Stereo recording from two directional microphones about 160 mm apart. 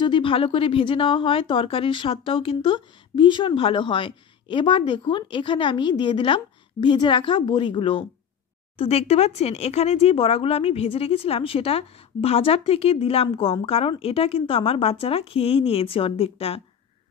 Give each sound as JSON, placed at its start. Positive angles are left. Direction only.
{"t": 0.0, "sound": "speech", "side_deg": 30}